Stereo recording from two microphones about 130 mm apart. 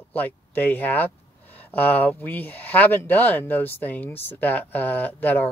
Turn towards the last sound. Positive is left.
turn(degrees=15)  # may be behind; listen again after turning